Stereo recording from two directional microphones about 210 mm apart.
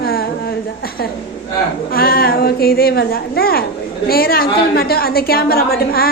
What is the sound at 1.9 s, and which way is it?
A woman's voice, 45° left (ahead or behind).